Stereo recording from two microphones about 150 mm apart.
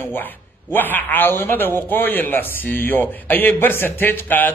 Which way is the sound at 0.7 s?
10° left (ahead or behind).